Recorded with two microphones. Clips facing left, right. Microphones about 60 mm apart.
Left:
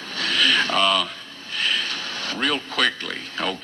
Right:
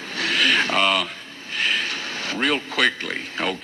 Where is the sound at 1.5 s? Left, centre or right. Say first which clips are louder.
Right 1 dB; right.